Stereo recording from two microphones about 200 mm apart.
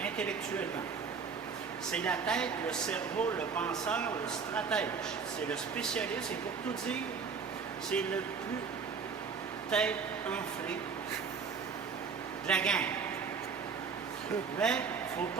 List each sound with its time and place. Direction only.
0.0 s a sound: 5° left (ahead or behind)
1.9 s speech: 5° left (ahead or behind)
9.6 s speech: 5° left (ahead or behind)
12.5 s speech: 5° left (ahead or behind)
14.6 s speech: 5° left (ahead or behind)